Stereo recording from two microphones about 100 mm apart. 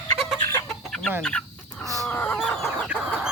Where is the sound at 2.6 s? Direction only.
10° right (ahead or behind).